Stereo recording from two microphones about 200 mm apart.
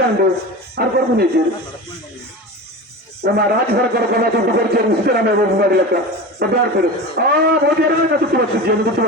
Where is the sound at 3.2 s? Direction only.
50° right (ahead or behind).